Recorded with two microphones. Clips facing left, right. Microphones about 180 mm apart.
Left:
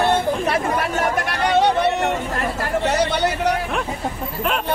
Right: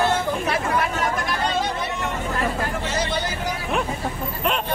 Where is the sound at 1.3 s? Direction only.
70° left (ahead or behind).